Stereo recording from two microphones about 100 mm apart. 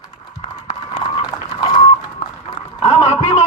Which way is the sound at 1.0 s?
40° left (ahead or behind).